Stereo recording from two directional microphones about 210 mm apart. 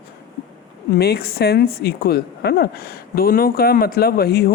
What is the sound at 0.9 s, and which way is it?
Speech, 50° left (ahead or behind).